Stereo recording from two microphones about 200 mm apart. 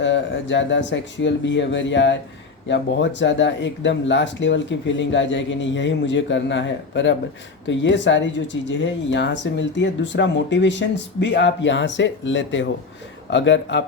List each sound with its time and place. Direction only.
0.0 s speech: 65° left (ahead or behind)